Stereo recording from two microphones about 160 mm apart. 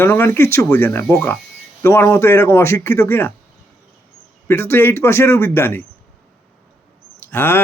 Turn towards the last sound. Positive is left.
turn(degrees=15)  # may be behind; listen again after turning